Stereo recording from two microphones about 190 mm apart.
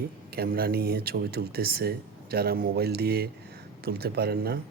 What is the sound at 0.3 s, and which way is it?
Speech, 50° right (ahead or behind).